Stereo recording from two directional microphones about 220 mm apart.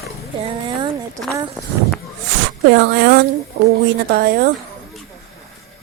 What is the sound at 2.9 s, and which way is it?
Speech, 50° right (ahead or behind).